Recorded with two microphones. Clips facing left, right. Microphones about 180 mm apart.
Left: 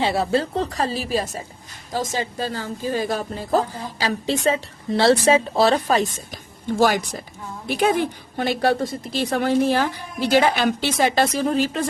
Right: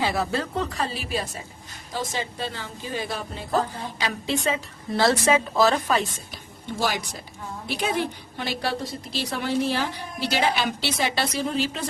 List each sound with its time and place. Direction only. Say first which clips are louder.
0.0 s a woman's voice: left 5 dB; 30° left (ahead or behind); by 11.9 s 45° left (ahead or behind)